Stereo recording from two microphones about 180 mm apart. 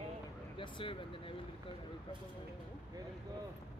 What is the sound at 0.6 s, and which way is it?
Speech, 30° left (ahead or behind).